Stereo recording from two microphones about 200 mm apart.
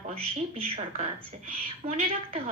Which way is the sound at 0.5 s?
30° right (ahead or behind).